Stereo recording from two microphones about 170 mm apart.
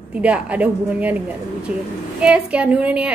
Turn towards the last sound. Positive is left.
turn(degrees=-5)  # may be behind; listen again after turning